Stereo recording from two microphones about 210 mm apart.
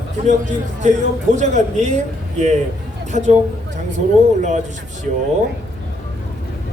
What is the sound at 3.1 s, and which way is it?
Speech, 35° right (ahead or behind).